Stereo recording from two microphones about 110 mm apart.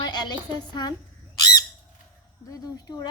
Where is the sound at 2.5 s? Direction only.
35° left (ahead or behind).